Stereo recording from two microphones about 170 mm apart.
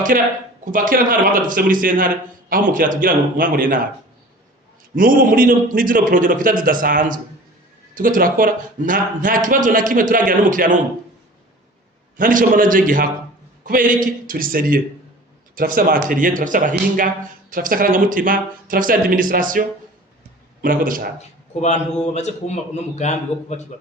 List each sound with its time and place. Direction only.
0.1 s a man's voice: 55° right (ahead or behind)
4.9 s speech: 55° right (ahead or behind)
12.1 s a man's voice: 50° right (ahead or behind)
21.5 s a man's voice: 45° left (ahead or behind)